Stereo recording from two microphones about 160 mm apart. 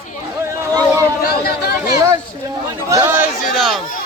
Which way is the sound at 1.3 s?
80° left.